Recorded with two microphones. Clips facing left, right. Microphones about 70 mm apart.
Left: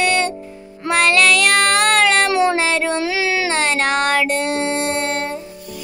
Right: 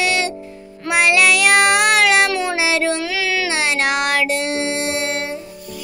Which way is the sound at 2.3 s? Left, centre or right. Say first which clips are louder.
Left 5 dB; left.